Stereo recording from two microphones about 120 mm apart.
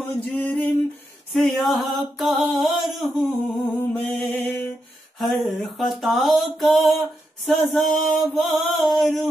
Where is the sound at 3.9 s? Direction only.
15° left (ahead or behind).